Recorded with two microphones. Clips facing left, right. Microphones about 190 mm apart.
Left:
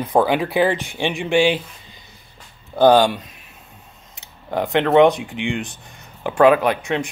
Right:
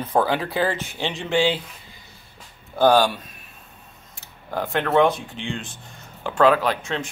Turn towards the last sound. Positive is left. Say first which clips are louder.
# left 4 dB
turn(degrees=15)  # may be behind; listen again after turning